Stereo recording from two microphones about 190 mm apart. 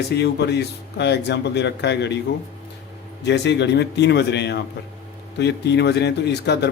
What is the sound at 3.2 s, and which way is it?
Speech, 65° left (ahead or behind).